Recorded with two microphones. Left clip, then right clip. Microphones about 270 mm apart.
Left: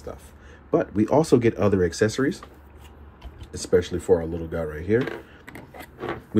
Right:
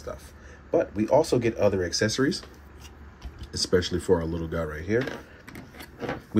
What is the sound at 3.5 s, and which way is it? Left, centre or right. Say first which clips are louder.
Speech: left 3 dB; centre.